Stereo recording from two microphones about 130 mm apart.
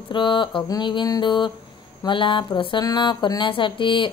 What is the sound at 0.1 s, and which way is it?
A woman's voice, 35° left (ahead or behind).